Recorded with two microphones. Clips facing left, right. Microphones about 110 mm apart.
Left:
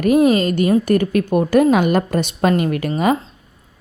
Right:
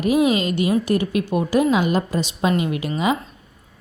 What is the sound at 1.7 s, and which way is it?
A woman's voice, 60° left (ahead or behind).